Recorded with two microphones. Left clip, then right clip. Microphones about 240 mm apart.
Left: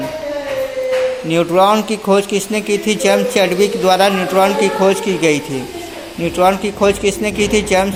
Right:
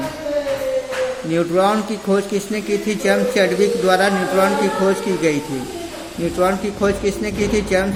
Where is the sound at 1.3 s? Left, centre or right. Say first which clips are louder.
Left 5 dB; centre.